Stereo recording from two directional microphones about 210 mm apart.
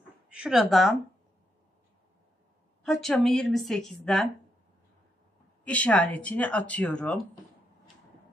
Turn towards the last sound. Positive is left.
turn(degrees=5)  # may be behind; listen again after turning